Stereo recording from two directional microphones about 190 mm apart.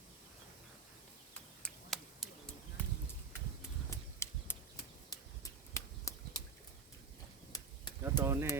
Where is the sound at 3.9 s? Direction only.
15° left (ahead or behind).